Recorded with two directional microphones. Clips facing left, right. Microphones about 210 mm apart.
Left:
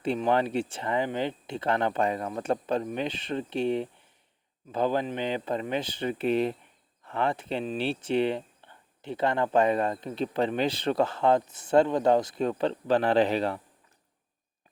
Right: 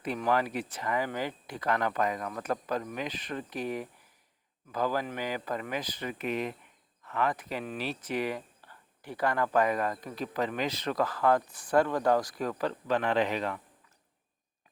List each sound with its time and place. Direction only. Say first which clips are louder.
0.0 s speech: left 4 dB; 25° left (ahead or behind)